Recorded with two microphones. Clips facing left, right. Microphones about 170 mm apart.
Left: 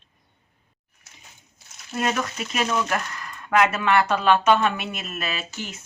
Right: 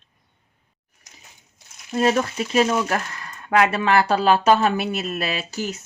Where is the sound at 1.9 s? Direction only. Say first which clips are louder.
Right 6 dB; 30° right (ahead or behind).